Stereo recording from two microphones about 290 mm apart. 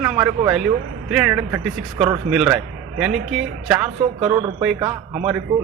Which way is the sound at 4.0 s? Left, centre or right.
Centre.